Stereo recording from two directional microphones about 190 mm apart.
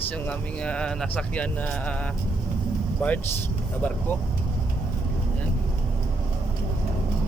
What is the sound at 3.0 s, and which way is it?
Speech, 10° left (ahead or behind).